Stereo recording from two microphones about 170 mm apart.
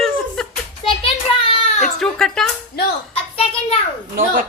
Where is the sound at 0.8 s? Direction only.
30° left (ahead or behind).